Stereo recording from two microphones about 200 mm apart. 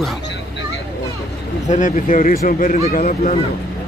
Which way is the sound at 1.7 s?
40° left (ahead or behind).